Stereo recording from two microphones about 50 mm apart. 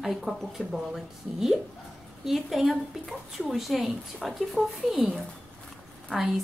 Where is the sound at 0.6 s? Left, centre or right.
Centre.